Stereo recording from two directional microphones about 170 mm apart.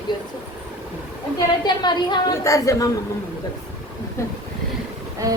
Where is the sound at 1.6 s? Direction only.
25° left (ahead or behind).